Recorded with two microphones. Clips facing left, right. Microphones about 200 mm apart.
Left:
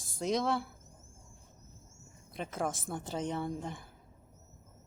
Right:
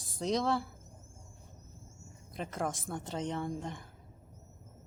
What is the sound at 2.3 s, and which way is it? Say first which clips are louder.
A woman's voice: left 1 dB; 5° left (ahead or behind).